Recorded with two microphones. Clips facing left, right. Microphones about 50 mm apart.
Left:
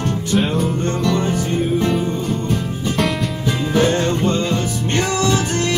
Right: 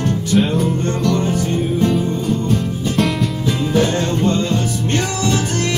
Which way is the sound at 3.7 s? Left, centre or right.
Left.